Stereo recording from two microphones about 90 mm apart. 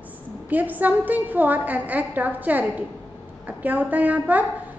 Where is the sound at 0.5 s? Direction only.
20° right (ahead or behind).